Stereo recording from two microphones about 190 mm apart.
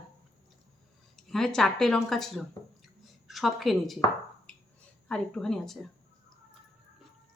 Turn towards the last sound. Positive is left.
turn(degrees=0)  # may be behind; listen again after turning